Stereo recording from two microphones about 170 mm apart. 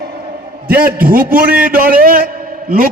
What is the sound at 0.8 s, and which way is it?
A man's voice, 60° right (ahead or behind).